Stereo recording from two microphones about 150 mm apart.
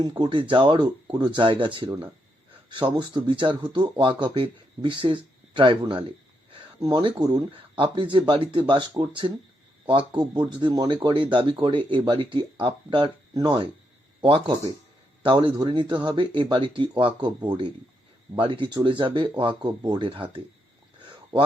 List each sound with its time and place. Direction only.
0.0 s speech: 30° right (ahead or behind)